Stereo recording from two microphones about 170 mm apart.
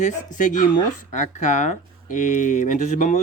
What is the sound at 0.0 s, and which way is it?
Speech, 45° left (ahead or behind).